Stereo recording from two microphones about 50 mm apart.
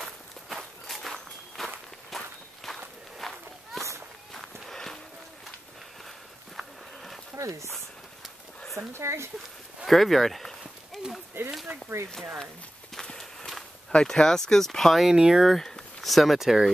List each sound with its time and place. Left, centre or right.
0.0 s walk: centre
6.5 s walk: centre
7.3 s speech: right
8.9 s speech: right
9.8 s speech: centre
11.4 s speech: right
12.9 s walk: centre
13.9 s speech: centre
15.0 s speech: centre
15.4 s speech: centre